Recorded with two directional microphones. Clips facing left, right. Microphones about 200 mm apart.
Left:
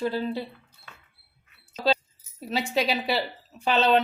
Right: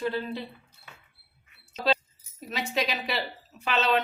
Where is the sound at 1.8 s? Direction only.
35° left (ahead or behind).